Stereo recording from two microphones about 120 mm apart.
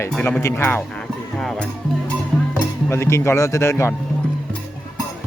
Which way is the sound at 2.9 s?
20° left (ahead or behind).